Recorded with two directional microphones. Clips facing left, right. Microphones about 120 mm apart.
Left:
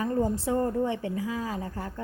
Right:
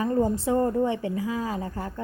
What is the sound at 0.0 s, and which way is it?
A woman's voice, 20° right (ahead or behind).